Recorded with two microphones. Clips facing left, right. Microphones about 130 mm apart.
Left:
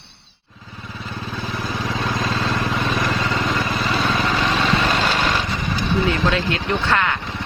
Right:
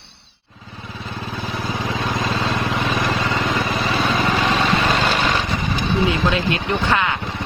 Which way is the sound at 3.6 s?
20° right (ahead or behind).